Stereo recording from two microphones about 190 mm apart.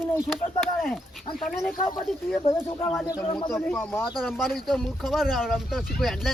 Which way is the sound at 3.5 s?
5° left (ahead or behind).